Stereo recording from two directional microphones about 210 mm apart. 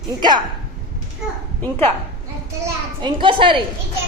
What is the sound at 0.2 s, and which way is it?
Speech, 20° right (ahead or behind).